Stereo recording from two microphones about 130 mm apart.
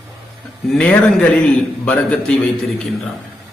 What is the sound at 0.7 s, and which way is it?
A man's voice, 10° left (ahead or behind).